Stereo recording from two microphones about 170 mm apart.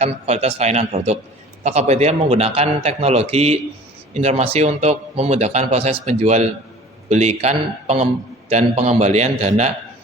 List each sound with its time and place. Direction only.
0.0 s a man's voice: 40° right (ahead or behind)